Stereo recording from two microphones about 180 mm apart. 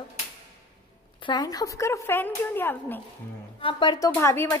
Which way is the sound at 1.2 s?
25° left (ahead or behind).